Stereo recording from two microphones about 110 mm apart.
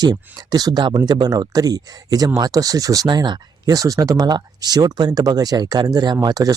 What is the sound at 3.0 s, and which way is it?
Speech, 45° right (ahead or behind).